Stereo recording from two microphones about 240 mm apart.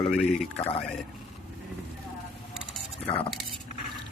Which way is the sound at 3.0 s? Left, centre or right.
Left.